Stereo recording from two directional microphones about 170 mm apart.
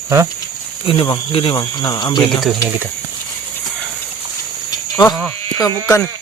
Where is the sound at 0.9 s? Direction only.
30° left (ahead or behind).